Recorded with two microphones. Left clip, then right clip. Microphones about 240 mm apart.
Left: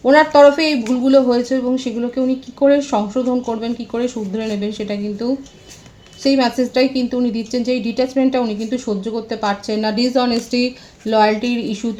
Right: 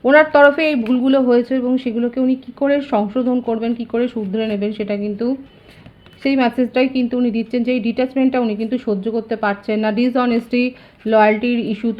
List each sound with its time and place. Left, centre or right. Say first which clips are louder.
0.0 s a woman's voice: left 1 dB; right